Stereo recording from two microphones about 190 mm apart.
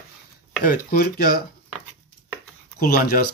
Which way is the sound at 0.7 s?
50° left (ahead or behind).